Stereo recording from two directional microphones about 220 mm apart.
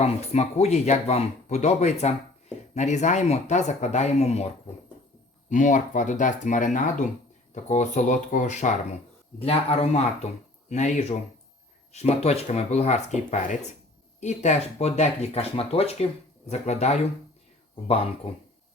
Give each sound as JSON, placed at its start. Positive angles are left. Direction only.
{"t": 0.0, "sound": "speech", "side_deg": 30}